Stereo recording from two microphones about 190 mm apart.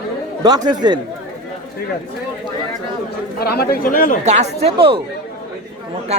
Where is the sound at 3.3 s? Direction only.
55° left (ahead or behind).